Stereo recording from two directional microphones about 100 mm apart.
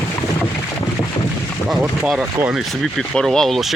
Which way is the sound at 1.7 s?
5° right (ahead or behind).